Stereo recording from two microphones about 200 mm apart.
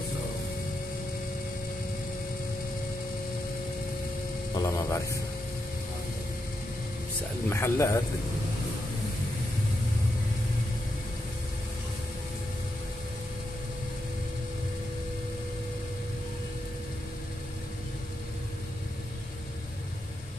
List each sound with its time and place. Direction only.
4.6 s speech: 15° left (ahead or behind)
7.4 s speech: 10° left (ahead or behind)